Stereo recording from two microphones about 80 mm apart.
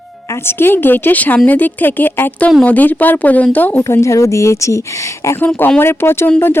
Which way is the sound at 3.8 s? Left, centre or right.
Left.